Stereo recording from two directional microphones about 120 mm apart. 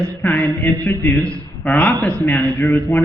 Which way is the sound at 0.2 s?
20° left (ahead or behind).